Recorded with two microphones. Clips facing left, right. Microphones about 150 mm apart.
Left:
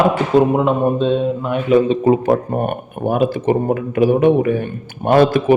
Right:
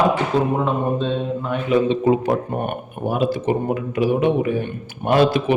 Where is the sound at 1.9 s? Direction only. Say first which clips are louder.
Left 4 dB; 45° left (ahead or behind).